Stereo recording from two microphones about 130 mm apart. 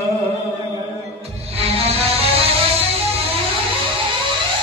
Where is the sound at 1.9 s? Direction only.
50° right (ahead or behind).